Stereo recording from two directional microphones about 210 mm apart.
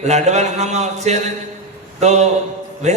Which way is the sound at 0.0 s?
35° right (ahead or behind).